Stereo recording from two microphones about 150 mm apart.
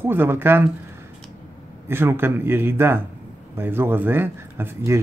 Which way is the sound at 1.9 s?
15° right (ahead or behind).